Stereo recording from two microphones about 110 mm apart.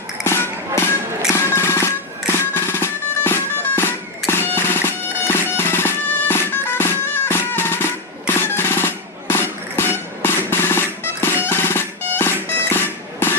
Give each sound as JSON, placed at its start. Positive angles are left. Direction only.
{"t": 0.3, "sound": "music", "side_deg": 25}